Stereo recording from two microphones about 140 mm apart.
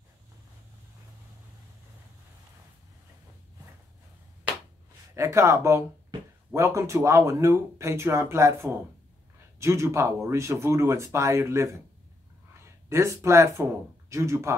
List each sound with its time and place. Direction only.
5.1 s speech: 20° right (ahead or behind)